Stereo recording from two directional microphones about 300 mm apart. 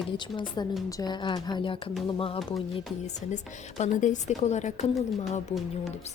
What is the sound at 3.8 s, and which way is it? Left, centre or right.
Speech, left.